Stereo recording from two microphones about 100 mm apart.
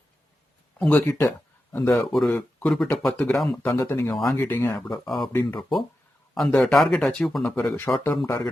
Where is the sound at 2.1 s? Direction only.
5° left (ahead or behind).